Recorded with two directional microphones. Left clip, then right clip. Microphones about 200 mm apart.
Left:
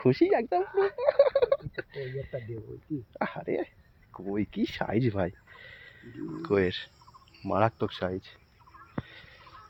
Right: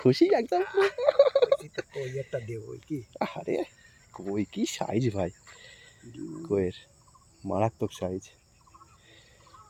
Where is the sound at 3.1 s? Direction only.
10° right (ahead or behind).